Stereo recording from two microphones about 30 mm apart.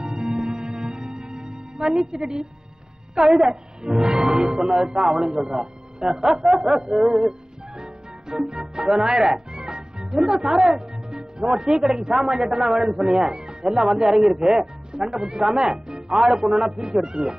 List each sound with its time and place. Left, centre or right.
0.0 s music: right
1.9 s a man's voice: right
3.2 s a woman's voice: centre
3.4 s a man's voice: right
4.1 s a man's voice: centre
7.1 s music: right
9.5 s music: right
10.4 s a woman's voice: centre
11.1 s a man's voice: right